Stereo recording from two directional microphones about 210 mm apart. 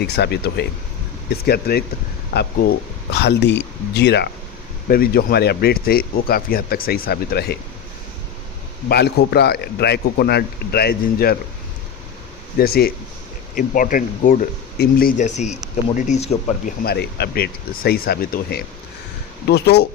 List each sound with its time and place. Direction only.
0.0 s speech: 50° left (ahead or behind)
3.1 s speech: 50° left (ahead or behind)
8.9 s speech: 50° left (ahead or behind)
12.5 s speech: 45° left (ahead or behind); by 16.7 s 30° left (ahead or behind)
16.8 s speech: 50° left (ahead or behind)